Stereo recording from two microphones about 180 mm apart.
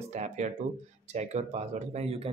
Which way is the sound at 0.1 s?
40° right (ahead or behind).